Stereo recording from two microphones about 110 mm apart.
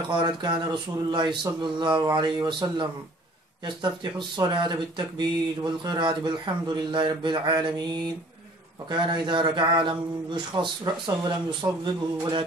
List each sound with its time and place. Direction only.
0.1 s speech: 45° right (ahead or behind)
8.9 s speech: 45° right (ahead or behind)